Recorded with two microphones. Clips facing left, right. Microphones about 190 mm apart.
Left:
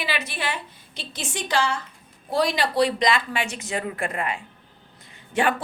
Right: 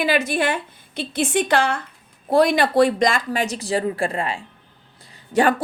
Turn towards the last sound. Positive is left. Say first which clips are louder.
# right 5 dB
turn(degrees=-40)  # may be behind; listen again after turning